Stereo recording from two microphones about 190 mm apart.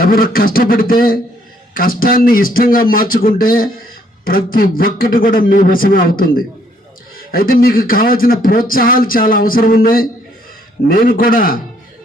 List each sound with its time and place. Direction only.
0.0 s speech: 50° left (ahead or behind)